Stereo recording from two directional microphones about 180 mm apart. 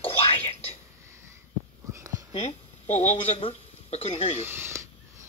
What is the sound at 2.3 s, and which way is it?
Speech, 40° left (ahead or behind).